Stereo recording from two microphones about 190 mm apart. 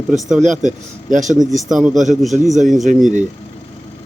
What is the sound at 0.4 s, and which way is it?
Speech, 40° right (ahead or behind).